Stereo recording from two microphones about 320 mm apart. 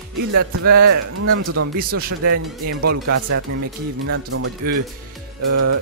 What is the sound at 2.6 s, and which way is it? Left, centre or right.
Speech, right.